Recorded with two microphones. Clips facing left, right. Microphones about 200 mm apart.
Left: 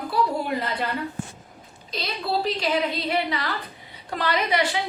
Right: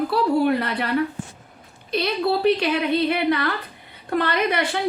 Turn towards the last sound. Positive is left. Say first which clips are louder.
# right 1 dB
turn(degrees=-55)  # may be behind; listen again after turning